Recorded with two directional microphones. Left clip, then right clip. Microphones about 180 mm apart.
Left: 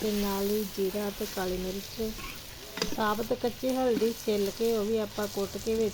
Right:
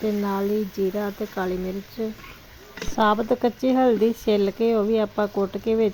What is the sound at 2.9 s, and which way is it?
Speech, 40° right (ahead or behind).